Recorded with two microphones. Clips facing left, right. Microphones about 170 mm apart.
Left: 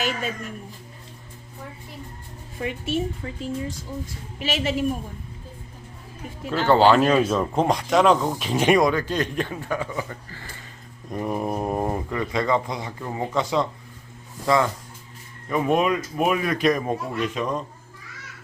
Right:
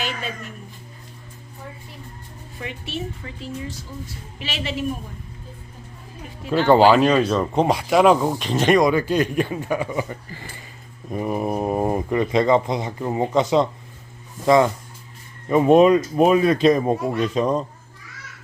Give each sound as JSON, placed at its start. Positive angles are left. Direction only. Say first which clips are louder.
{"t": 2.6, "sound": "a woman's voice", "louder": "left 5 dB", "side_deg": 45}
{"t": 3.2, "sound": "speech", "louder": "left 3 dB", "side_deg": 35}
{"t": 3.7, "sound": "a woman's voice", "louder": "left 2 dB", "side_deg": 45}
{"t": 6.7, "sound": "a man's voice", "louder": "right 2 dB", "side_deg": -10}
{"t": 7.0, "sound": "speech", "louder": "right 2 dB", "side_deg": 5}
{"t": 8.4, "sound": "speech", "louder": "right 2 dB", "side_deg": 5}
{"t": 8.8, "sound": "a man's voice", "louder": "right 3 dB", "side_deg": -10}
{"t": 11.9, "sound": "speech", "louder": "right 6 dB", "side_deg": -20}